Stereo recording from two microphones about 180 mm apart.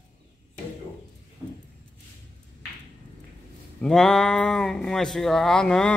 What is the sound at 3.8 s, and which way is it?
Speech, 5° left (ahead or behind).